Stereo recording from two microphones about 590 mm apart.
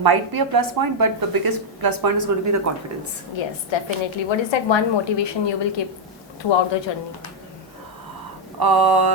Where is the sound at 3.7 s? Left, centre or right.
Left.